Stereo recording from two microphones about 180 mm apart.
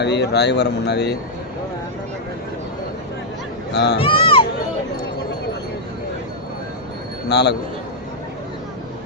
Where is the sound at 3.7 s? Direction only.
70° left (ahead or behind).